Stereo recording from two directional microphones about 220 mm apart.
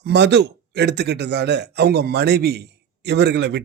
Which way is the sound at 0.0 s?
50° right (ahead or behind).